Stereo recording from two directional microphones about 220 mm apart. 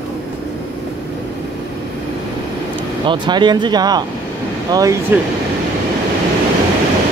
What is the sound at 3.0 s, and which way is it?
Speech, 20° right (ahead or behind).